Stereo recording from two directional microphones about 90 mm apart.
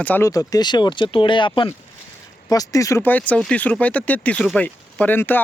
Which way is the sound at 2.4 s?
45° left (ahead or behind).